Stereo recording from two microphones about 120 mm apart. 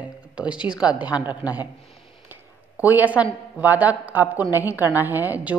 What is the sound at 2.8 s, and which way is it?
A woman's voice, 15° right (ahead or behind).